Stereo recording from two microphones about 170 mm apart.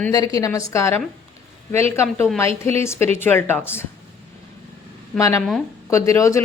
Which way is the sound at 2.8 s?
15° left (ahead or behind).